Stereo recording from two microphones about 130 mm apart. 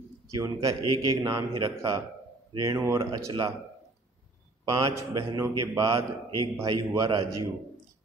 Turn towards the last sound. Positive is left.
turn(degrees=-30)  # may be behind; listen again after turning